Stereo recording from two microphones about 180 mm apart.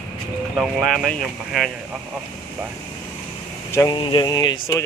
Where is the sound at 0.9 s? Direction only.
5° left (ahead or behind).